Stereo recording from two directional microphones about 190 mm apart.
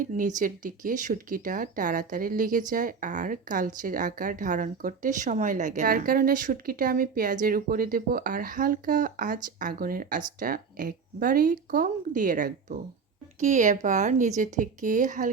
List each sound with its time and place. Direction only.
0.0 s speech: 40° right (ahead or behind)